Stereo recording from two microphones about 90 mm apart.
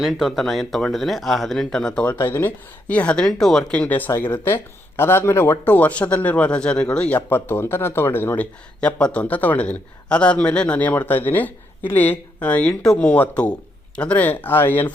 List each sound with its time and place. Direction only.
0.0 s speech: 5° right (ahead or behind)
2.1 s speech: 25° left (ahead or behind)
8.8 s a man's voice: 10° left (ahead or behind)